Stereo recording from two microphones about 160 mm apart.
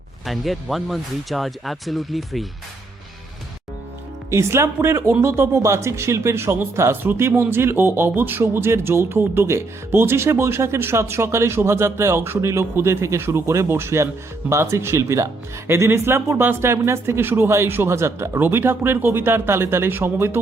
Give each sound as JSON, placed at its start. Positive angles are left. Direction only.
{"t": 0.3, "sound": "speech", "side_deg": 0}
{"t": 4.3, "sound": "speech", "side_deg": -15}